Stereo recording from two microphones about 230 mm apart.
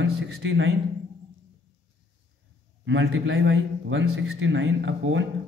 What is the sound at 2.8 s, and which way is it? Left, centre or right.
A man's voice, right.